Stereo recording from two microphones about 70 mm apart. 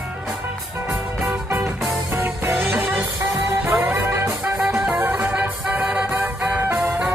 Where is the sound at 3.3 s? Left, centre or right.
Right.